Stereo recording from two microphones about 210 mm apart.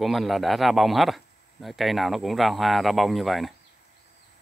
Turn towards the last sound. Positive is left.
turn(degrees=0)  # may be behind; listen again after turning